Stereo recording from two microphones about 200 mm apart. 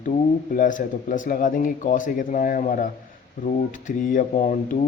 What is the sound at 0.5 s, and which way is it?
A man's voice, 40° left (ahead or behind).